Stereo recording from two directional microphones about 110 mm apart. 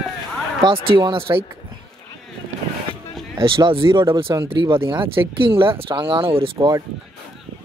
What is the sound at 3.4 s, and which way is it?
Speech, 50° right (ahead or behind).